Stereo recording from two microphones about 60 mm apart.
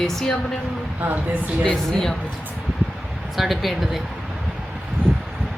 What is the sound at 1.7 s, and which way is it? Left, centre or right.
Speech, centre.